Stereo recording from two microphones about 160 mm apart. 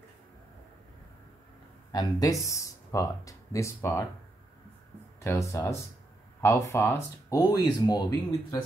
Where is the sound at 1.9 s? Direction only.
20° left (ahead or behind).